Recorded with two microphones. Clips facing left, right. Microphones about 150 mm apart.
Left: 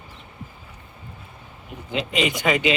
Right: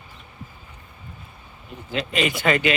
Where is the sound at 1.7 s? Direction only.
20° left (ahead or behind).